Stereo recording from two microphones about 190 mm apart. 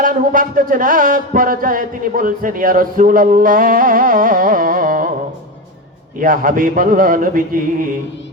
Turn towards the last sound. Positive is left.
turn(degrees=-45)  # may be behind; listen again after turning